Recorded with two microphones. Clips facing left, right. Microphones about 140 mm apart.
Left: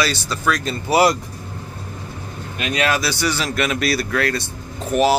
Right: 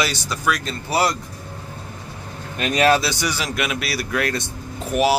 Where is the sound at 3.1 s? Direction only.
15° right (ahead or behind).